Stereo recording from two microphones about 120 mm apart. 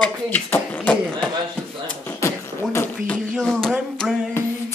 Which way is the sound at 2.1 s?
25° left (ahead or behind).